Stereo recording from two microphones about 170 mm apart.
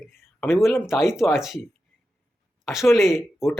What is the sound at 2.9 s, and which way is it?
Speech, centre (ahead or behind).